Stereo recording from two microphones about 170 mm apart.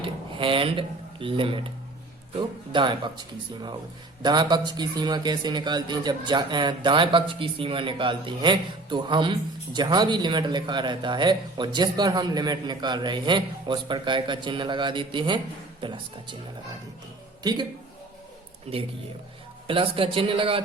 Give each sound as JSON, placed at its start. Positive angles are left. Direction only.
{"t": 0.0, "sound": "a man's voice", "side_deg": -30}
{"t": 17.4, "sound": "speech", "side_deg": -25}
{"t": 18.7, "sound": "speech", "side_deg": -40}